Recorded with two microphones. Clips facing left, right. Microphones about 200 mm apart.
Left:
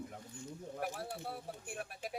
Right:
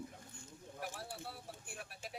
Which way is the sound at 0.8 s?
55° left (ahead or behind).